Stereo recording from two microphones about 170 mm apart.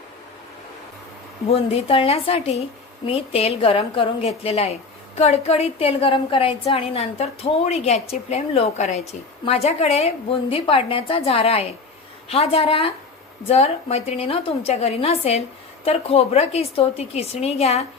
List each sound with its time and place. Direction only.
1.5 s a woman's voice: 35° left (ahead or behind)